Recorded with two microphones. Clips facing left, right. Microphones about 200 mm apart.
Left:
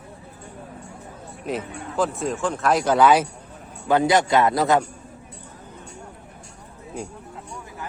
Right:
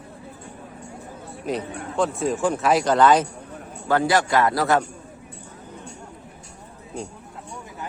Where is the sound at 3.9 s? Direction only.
20° left (ahead or behind).